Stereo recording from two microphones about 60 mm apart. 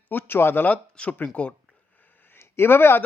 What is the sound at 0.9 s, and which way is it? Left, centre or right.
Speech, left.